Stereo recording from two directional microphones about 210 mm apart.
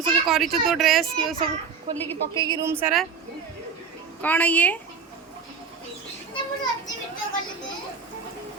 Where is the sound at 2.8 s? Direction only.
35° right (ahead or behind).